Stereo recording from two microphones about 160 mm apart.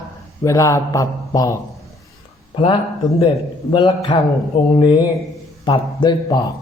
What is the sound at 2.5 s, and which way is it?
Speech, 35° left (ahead or behind).